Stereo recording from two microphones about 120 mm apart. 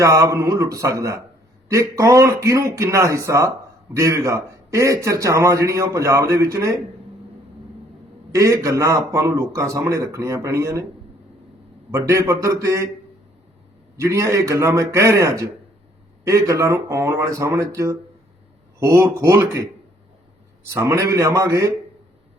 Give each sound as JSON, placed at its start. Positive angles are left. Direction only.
{"t": 0.0, "sound": "a man's voice", "side_deg": -25}
{"t": 8.3, "sound": "a man's voice", "side_deg": -25}
{"t": 11.9, "sound": "a man's voice", "side_deg": -25}
{"t": 13.9, "sound": "a man's voice", "side_deg": -25}
{"t": 20.7, "sound": "a man's voice", "side_deg": -25}